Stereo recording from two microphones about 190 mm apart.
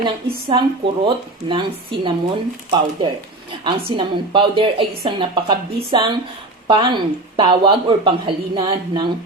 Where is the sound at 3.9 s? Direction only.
25° right (ahead or behind).